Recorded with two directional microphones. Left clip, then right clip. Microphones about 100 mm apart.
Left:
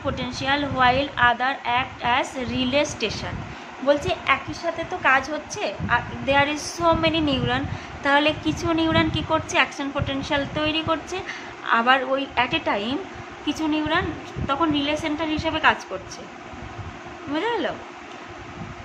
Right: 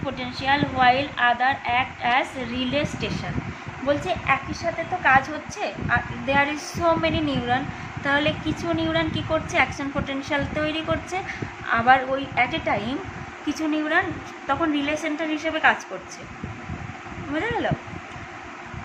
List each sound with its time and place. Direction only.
0.0 s a woman's voice: 25° left (ahead or behind)
2.5 s a woman's voice: 30° left (ahead or behind)
13.5 s a woman's voice: 5° left (ahead or behind); by 15.7 s 25° left (ahead or behind)
17.3 s a woman's voice: 25° left (ahead or behind)